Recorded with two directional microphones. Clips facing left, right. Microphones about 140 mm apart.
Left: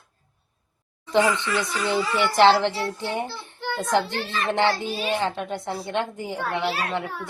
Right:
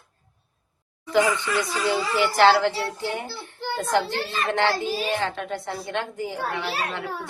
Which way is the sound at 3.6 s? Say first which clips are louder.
Even; 40° right (ahead or behind).